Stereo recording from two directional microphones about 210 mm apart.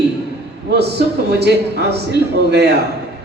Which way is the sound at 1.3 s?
50° right (ahead or behind).